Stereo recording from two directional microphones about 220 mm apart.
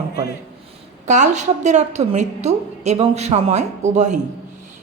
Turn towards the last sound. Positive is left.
turn(degrees=-30)  # may be behind; listen again after turning